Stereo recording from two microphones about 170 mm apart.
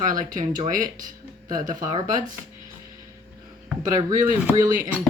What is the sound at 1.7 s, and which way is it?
Speech, 20° right (ahead or behind).